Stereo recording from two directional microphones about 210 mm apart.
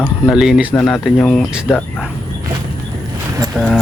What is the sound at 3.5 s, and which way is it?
Speech, centre (ahead or behind).